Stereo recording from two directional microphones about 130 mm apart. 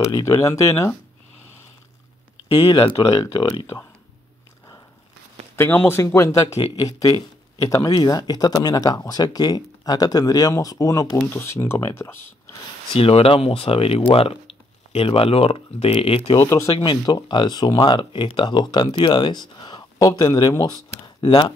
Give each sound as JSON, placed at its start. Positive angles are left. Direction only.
{"t": 0.0, "sound": "speech", "side_deg": 25}
{"t": 2.4, "sound": "speech", "side_deg": 45}
{"t": 5.6, "sound": "speech", "side_deg": 20}
{"t": 6.5, "sound": "speech", "side_deg": 55}
{"t": 7.0, "sound": "speech", "side_deg": 30}
{"t": 12.9, "sound": "speech", "side_deg": 45}
{"t": 16.3, "sound": "speech", "side_deg": 25}
{"t": 16.6, "sound": "speech", "side_deg": 40}